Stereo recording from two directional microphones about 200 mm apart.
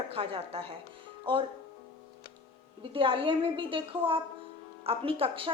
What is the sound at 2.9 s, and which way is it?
A woman's voice, 25° right (ahead or behind).